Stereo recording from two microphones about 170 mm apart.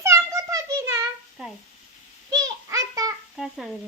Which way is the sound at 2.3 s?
20° right (ahead or behind).